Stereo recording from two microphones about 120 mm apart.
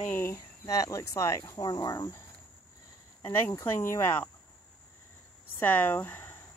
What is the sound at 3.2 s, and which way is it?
Speech, 15° left (ahead or behind).